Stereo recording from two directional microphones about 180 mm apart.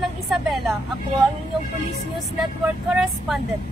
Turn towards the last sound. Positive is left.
turn(degrees=0)  # may be behind; listen again after turning